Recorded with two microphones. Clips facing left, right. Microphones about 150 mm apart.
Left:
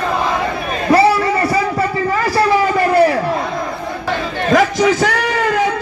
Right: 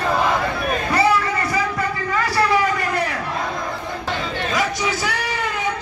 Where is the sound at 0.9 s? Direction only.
30° left (ahead or behind).